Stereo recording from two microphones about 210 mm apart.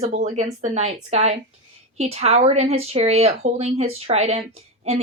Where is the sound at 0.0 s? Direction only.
30° right (ahead or behind).